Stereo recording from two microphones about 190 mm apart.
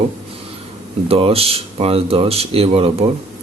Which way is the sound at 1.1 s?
30° right (ahead or behind).